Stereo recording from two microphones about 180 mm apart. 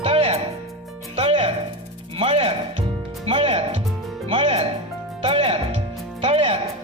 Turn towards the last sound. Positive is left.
turn(degrees=-35)  # may be behind; listen again after turning